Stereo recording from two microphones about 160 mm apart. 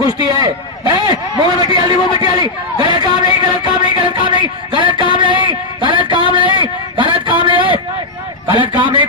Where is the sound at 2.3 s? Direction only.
25° right (ahead or behind).